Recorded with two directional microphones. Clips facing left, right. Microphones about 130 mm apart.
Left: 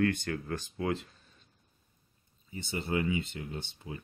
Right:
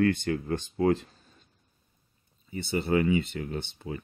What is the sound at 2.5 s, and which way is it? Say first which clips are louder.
Speech: right 7 dB; 70° right (ahead or behind).